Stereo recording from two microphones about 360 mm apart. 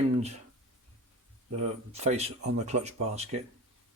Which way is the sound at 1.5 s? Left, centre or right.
Centre.